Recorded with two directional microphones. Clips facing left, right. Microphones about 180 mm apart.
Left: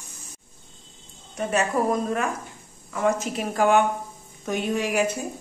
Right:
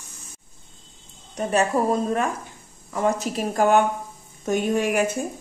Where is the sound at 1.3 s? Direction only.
35° right (ahead or behind); by 5.1 s 50° right (ahead or behind).